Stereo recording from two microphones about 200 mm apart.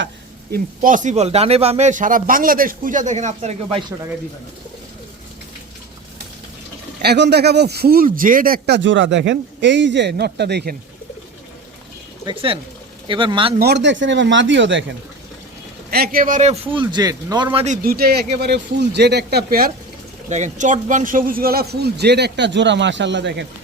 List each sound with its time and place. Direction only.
0.5 s speech: 40° right (ahead or behind)
7.0 s a man's voice: 55° right (ahead or behind)
12.2 s speech: 25° right (ahead or behind)
13.6 s a man's voice: 60° right (ahead or behind)
15.9 s speech: 50° right (ahead or behind)
16.8 s speech: 20° right (ahead or behind)
17.8 s speech: 50° right (ahead or behind)
20.3 s a man's voice: 35° right (ahead or behind); by 23.5 s 60° right (ahead or behind)